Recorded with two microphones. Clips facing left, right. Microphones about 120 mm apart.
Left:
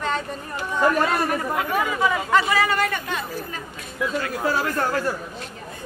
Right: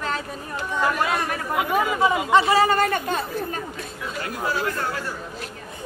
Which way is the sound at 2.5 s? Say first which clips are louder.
Right 3 dB; 35° right (ahead or behind).